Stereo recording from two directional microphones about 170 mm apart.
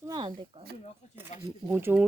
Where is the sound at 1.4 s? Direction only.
15° right (ahead or behind).